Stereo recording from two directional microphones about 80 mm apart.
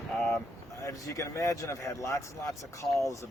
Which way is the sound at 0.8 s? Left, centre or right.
Left.